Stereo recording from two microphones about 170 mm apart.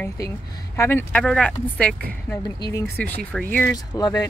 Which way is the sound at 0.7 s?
15° left (ahead or behind).